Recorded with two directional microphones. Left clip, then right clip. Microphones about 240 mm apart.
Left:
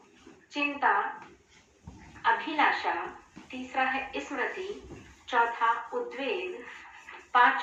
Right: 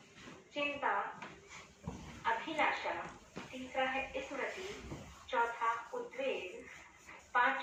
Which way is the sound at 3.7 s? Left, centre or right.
Left.